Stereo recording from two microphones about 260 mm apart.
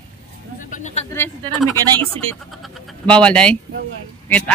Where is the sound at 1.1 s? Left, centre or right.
Centre.